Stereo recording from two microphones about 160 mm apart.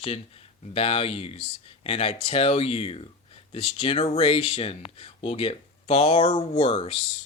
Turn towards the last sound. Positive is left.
turn(degrees=35)  # may be behind; listen again after turning